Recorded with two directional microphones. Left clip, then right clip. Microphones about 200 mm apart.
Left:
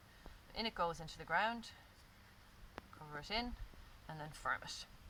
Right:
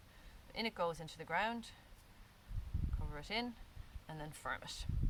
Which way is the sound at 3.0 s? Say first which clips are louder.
Even; centre (ahead or behind).